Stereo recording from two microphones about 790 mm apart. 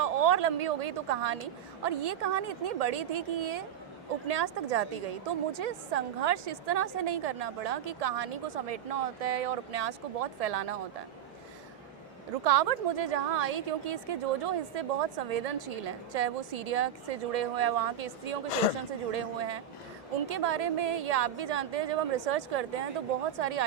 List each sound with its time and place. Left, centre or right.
0.0 s a woman's voice: right
12.5 s a woman's voice: right